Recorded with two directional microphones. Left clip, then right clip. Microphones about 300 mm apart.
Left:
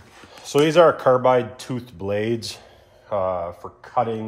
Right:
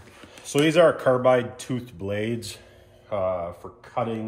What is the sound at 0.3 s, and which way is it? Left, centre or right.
Speech, centre.